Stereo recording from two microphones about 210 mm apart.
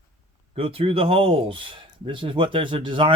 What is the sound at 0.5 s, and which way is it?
Speech, 25° right (ahead or behind).